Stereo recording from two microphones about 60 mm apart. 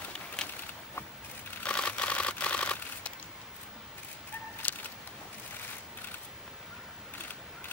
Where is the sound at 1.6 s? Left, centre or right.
Centre.